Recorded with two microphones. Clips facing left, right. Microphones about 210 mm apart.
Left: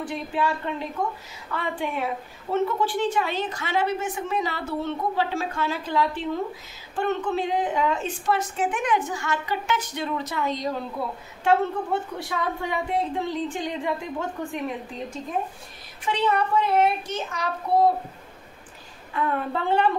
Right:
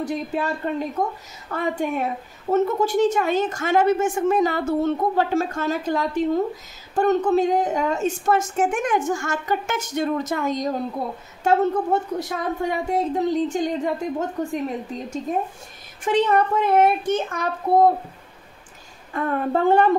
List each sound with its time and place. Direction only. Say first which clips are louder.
0.0 s a woman's voice: right 2 dB; 40° right (ahead or behind)
16.0 s a woman's voice: right 5 dB; 45° right (ahead or behind)
19.1 s a woman's voice: right 4 dB; 45° right (ahead or behind)